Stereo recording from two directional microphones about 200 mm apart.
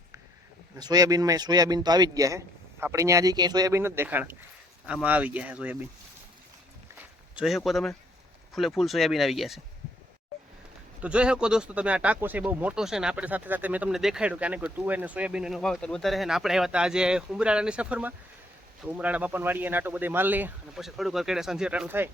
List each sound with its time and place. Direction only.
0.8 s speech: 20° right (ahead or behind)
6.9 s a sound: 5° right (ahead or behind)
8.5 s speech: centre (ahead or behind)
11.0 s speech: 5° right (ahead or behind)